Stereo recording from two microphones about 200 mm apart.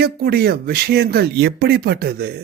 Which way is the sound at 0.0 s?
50° right (ahead or behind).